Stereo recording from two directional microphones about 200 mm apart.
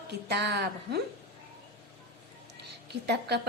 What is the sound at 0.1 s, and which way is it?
Speech, 55° right (ahead or behind).